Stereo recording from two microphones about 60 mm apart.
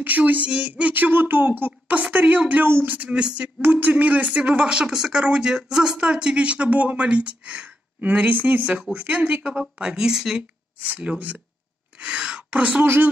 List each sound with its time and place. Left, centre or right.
0.0 s a woman's voice: right
3.6 s speech: right
9.8 s speech: centre
10.8 s speech: right
12.8 s a woman's voice: right